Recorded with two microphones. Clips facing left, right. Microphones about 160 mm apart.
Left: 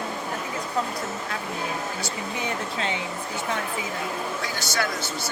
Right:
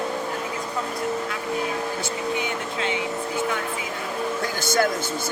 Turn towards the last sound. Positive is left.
turn(degrees=-50)  # may be behind; listen again after turning